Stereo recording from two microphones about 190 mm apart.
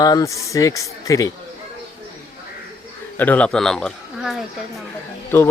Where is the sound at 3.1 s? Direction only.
10° left (ahead or behind).